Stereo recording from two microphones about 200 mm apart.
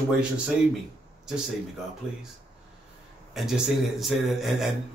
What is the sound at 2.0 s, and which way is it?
Speech, 5° right (ahead or behind).